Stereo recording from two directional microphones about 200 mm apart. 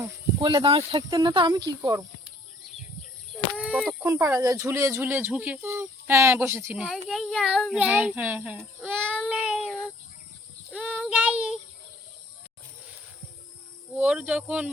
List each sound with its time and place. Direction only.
0.3 s speech: 25° right (ahead or behind)
3.3 s fowl: 5° right (ahead or behind)
4.0 s speech: 15° right (ahead or behind)
9.1 s child singing: 5° left (ahead or behind)
14.0 s speech: 5° right (ahead or behind)